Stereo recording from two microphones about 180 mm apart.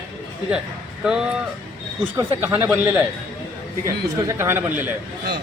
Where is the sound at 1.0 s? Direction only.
5° right (ahead or behind).